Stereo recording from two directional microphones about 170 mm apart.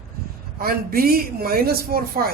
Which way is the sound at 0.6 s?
60° right (ahead or behind).